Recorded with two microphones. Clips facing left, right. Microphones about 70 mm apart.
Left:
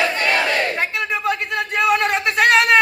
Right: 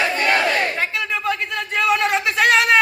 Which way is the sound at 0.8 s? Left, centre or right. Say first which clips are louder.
Left 1 dB; centre.